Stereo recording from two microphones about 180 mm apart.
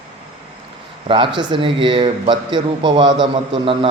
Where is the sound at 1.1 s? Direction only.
30° right (ahead or behind).